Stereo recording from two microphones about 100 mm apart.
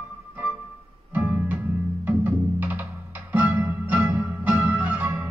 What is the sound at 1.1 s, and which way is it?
Music, 20° right (ahead or behind).